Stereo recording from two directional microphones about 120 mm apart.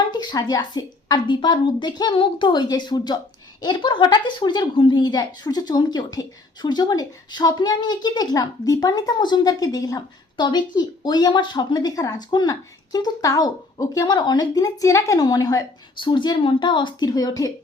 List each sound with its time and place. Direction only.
0.1 s a woman's voice: 35° left (ahead or behind)
16.0 s a woman's voice: 40° left (ahead or behind)